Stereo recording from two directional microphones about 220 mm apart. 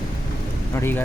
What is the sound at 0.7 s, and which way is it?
Speech, 10° left (ahead or behind).